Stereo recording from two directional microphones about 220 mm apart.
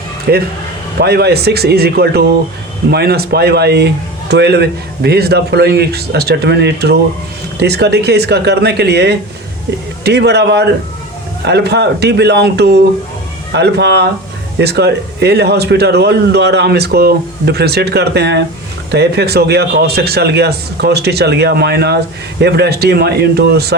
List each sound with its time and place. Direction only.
0.3 s speech: 50° right (ahead or behind)